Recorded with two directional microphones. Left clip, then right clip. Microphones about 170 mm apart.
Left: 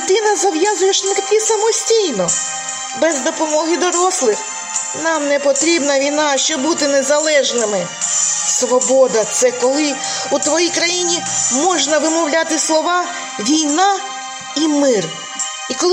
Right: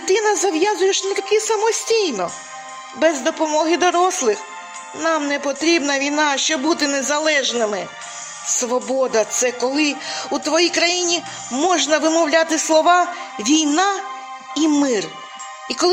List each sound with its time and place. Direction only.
0.1 s music: 40° right (ahead or behind)
3.0 s speech: 40° right (ahead or behind)
8.7 s music: 45° right (ahead or behind)
11.6 s speech: 40° right (ahead or behind)